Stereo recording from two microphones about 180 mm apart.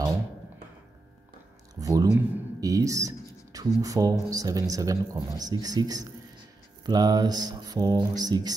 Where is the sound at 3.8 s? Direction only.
20° right (ahead or behind).